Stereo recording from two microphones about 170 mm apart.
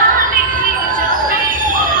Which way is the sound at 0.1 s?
50° right (ahead or behind).